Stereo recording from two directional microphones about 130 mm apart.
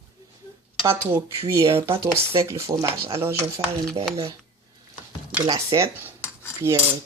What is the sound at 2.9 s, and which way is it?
Speech, 50° right (ahead or behind).